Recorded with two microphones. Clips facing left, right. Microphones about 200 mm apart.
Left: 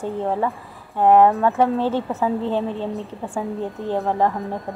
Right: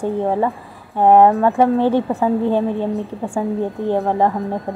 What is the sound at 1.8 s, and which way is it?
A woman's voice, 15° right (ahead or behind).